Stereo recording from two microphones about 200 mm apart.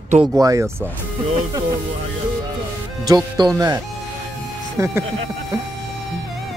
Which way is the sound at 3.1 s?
20° right (ahead or behind).